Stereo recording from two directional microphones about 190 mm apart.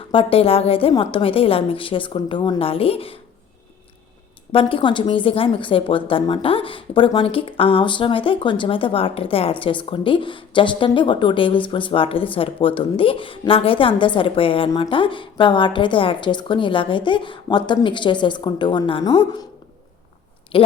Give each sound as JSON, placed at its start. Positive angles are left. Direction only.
{"t": 0.1, "sound": "a woman's voice", "side_deg": 30}
{"t": 4.5, "sound": "a woman's voice", "side_deg": 25}